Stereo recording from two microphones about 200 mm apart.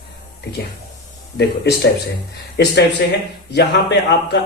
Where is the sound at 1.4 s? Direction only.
55° left (ahead or behind).